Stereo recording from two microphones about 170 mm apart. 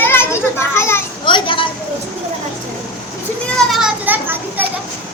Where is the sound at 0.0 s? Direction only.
15° left (ahead or behind).